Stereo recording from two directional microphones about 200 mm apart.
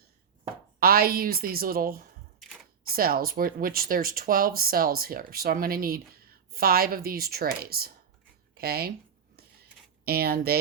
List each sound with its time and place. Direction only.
0.8 s speech: 50° right (ahead or behind)
2.4 s camera: centre (ahead or behind)
2.9 s speech: 50° right (ahead or behind)
10.1 s speech: 50° right (ahead or behind)